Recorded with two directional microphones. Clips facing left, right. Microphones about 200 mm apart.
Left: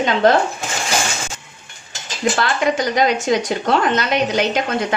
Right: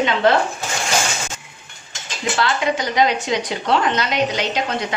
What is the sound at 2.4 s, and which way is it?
A woman's voice, 50° left (ahead or behind).